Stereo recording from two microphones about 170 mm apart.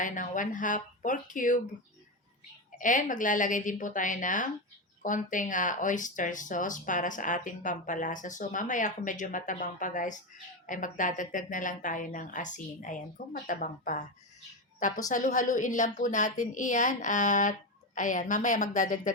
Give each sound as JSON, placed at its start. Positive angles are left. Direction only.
{"t": 0.0, "sound": "speech", "side_deg": 50}
{"t": 2.7, "sound": "speech", "side_deg": 50}
{"t": 15.1, "sound": "speech", "side_deg": 50}